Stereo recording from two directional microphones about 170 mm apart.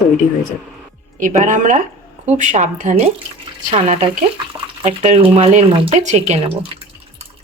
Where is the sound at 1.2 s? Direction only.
50° right (ahead or behind).